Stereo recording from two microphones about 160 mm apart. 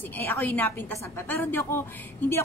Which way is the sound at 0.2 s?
15° left (ahead or behind).